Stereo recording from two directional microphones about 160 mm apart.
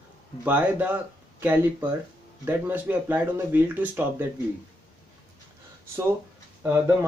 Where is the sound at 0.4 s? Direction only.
10° right (ahead or behind).